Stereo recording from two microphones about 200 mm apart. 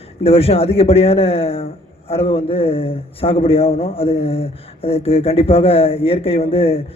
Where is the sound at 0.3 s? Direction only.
30° left (ahead or behind).